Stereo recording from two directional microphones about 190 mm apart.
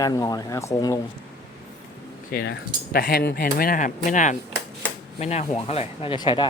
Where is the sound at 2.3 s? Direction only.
55° left (ahead or behind).